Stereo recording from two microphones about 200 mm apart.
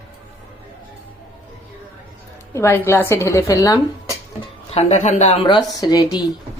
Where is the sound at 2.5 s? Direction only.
15° left (ahead or behind).